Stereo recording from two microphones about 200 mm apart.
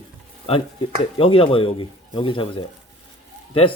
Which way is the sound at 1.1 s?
25° left (ahead or behind).